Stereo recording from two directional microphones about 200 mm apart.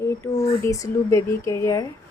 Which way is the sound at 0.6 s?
15° left (ahead or behind).